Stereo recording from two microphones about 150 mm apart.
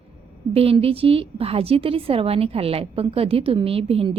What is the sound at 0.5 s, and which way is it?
A woman's voice, 40° right (ahead or behind).